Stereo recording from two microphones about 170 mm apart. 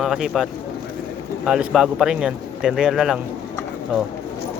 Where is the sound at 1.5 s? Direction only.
5° right (ahead or behind).